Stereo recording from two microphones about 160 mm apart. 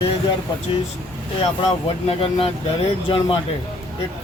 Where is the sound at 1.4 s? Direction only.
35° left (ahead or behind).